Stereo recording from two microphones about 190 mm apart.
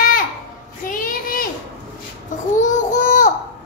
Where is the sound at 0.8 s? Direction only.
45° left (ahead or behind).